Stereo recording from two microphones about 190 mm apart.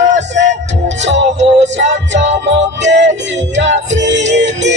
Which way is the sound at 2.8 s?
65° right (ahead or behind).